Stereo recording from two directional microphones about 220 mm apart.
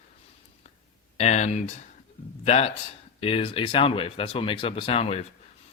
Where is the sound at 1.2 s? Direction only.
30° left (ahead or behind).